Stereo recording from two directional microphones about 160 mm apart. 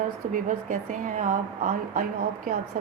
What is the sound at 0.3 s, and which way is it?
A woman's voice, 55° right (ahead or behind).